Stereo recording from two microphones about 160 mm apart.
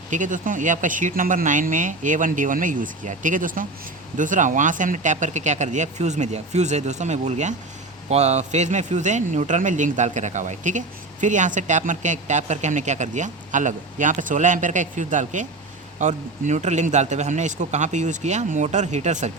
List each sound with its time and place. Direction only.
0.1 s speech: 55° right (ahead or behind)